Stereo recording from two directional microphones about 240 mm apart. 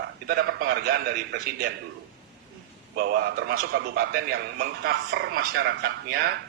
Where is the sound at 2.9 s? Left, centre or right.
Right.